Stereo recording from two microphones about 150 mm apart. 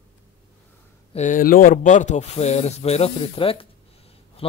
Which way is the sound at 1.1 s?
60° left (ahead or behind).